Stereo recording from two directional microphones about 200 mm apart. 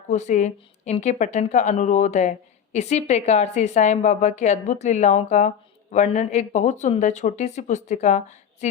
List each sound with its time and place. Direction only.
0.1 s a woman's voice: 35° left (ahead or behind)